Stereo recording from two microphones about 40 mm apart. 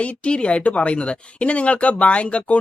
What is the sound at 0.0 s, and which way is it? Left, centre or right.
Speech, left.